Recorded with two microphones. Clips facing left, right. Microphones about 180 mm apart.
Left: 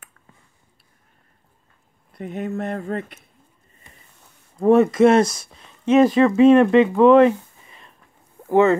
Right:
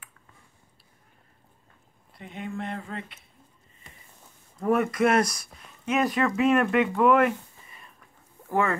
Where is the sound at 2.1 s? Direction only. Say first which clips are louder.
Left 8 dB; 45° left (ahead or behind).